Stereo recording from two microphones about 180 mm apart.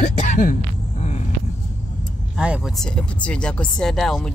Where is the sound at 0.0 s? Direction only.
40° left (ahead or behind).